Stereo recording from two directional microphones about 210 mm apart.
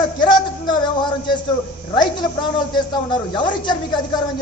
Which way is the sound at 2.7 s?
20° left (ahead or behind).